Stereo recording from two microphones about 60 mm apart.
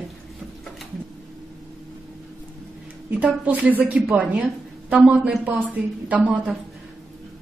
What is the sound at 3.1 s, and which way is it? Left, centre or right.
A woman's voice, right.